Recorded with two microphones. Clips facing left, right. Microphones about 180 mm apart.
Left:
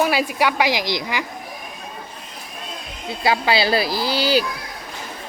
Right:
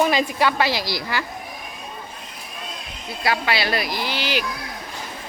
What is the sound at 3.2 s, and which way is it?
Speech, 30° left (ahead or behind).